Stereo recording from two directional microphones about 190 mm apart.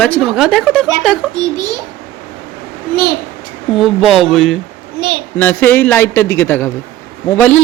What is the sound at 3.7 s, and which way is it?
A man's voice, centre (ahead or behind).